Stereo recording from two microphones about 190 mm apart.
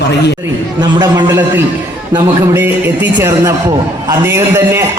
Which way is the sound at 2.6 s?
10° right (ahead or behind).